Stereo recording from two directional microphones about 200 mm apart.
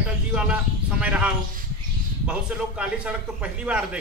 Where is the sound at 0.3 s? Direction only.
5° right (ahead or behind).